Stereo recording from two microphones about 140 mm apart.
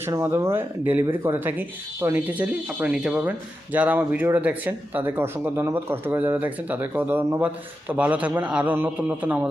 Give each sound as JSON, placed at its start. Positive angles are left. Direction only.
{"t": 0.0, "sound": "speech", "side_deg": -20}